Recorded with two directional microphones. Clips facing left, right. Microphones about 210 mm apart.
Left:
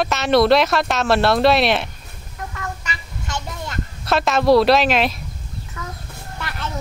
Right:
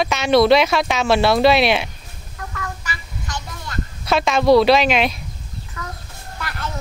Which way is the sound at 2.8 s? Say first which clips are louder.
Even; 25° left (ahead or behind).